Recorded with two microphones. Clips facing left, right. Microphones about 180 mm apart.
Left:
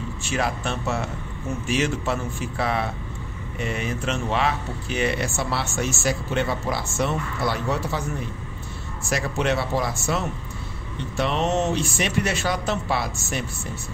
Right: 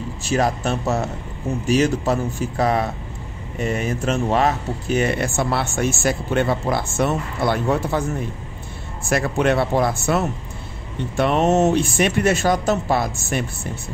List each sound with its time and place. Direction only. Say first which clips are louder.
0.2 s a man's voice: right 6 dB; 40° right (ahead or behind)
9.1 s speech: right 5 dB; 55° right (ahead or behind)